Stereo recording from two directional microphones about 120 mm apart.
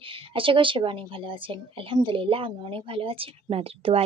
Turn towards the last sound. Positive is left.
turn(degrees=-55)  # may be behind; listen again after turning